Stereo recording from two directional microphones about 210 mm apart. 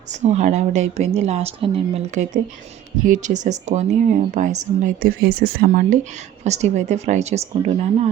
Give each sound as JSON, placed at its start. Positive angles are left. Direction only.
{"t": 0.1, "sound": "speech", "side_deg": -35}
{"t": 6.4, "sound": "speech", "side_deg": -30}